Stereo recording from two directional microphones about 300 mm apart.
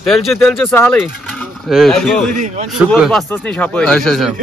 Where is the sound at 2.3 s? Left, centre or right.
Right.